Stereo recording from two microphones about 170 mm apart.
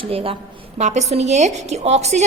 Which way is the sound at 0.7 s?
40° right (ahead or behind).